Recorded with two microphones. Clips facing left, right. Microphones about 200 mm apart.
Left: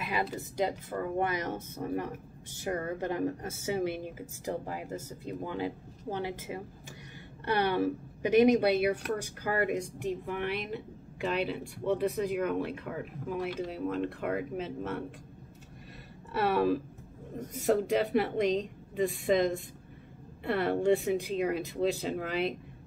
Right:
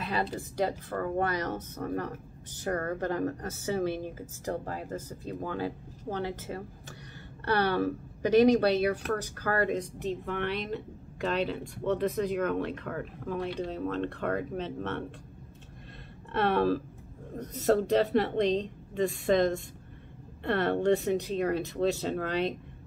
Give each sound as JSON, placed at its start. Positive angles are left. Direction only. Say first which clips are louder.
{"t": 0.1, "sound": "speech", "louder": "right 1 dB", "side_deg": 15}
{"t": 16.3, "sound": "a woman's voice", "louder": "right 1 dB", "side_deg": 5}
{"t": 20.4, "sound": "speech", "louder": "right 1 dB", "side_deg": 10}